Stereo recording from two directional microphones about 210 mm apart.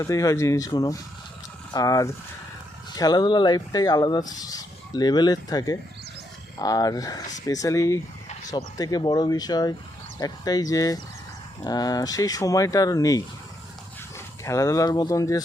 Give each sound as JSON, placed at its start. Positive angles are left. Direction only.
{"t": 0.0, "sound": "speech", "side_deg": 15}
{"t": 14.4, "sound": "speech", "side_deg": 15}